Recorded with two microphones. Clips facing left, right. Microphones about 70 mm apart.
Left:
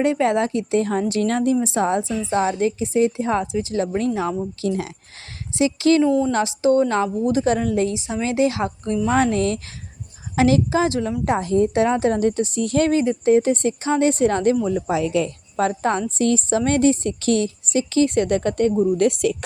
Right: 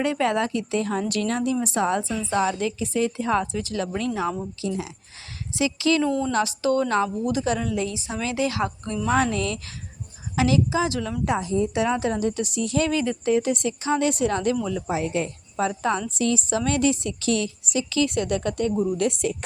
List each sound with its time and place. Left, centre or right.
0.0 s a woman's voice: left
4.6 s a woman's voice: left
6.0 s speech: centre
6.3 s a woman's voice: left
7.9 s a woman's voice: left
11.3 s a woman's voice: left
11.7 s a woman's voice: left
14.8 s a woman's voice: left
15.6 s a woman's voice: left
18.9 s speech: left